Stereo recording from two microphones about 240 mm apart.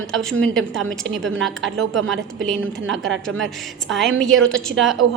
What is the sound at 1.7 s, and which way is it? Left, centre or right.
A woman's voice, right.